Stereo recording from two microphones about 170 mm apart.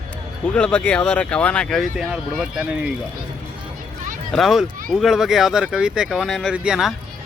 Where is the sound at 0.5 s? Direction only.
5° left (ahead or behind).